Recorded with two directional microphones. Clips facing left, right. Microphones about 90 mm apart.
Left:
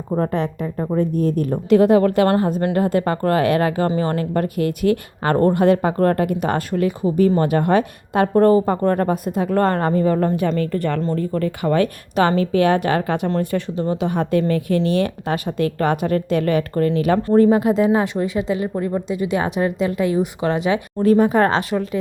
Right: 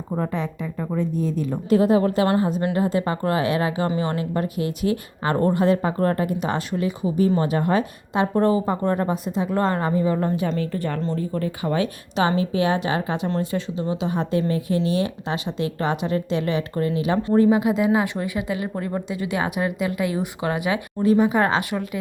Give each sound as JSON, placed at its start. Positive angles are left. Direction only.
{"t": 0.2, "sound": "a woman's voice", "side_deg": 55}
{"t": 3.8, "sound": "a woman's voice", "side_deg": 40}
{"t": 11.0, "sound": "a woman's voice", "side_deg": 55}
{"t": 18.4, "sound": "speech", "side_deg": 25}
{"t": 18.9, "sound": "speech", "side_deg": -20}
{"t": 19.5, "sound": "a woman's voice", "side_deg": 30}
{"t": 21.0, "sound": "a woman's voice", "side_deg": 45}